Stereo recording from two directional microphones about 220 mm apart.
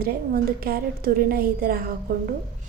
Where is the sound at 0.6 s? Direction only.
40° right (ahead or behind).